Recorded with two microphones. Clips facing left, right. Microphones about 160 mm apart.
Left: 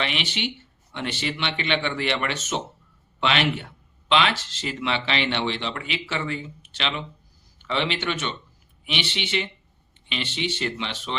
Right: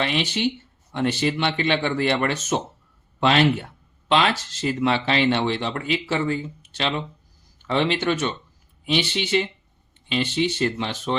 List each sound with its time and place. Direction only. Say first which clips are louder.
0.0 s speech: right 5 dB; 40° right (ahead or behind)